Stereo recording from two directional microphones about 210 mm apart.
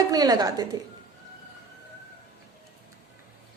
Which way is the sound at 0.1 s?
15° right (ahead or behind).